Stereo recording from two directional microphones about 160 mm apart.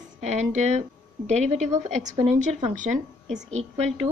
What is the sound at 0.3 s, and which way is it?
Speech, 45° right (ahead or behind).